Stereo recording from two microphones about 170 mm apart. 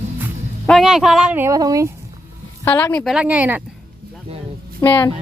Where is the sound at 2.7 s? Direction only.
10° left (ahead or behind).